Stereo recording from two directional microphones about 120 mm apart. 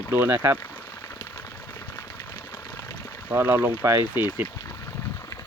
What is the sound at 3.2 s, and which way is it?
Speech, 20° right (ahead or behind).